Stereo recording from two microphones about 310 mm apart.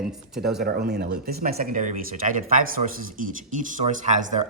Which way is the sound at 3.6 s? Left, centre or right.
Right.